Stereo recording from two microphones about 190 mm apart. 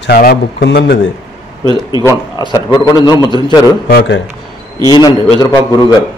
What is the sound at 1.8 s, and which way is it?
Speech, 20° left (ahead or behind).